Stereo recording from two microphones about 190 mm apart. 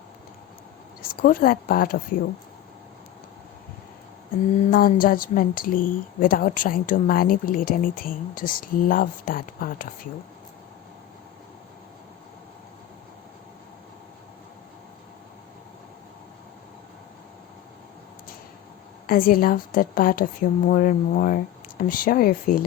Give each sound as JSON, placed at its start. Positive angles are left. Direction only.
{"t": 1.0, "sound": "a woman's voice", "side_deg": 50}
{"t": 4.7, "sound": "a woman's voice", "side_deg": 50}
{"t": 19.0, "sound": "a woman's voice", "side_deg": 50}